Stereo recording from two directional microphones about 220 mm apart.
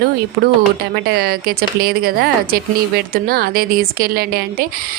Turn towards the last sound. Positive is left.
turn(degrees=-45)  # may be behind; listen again after turning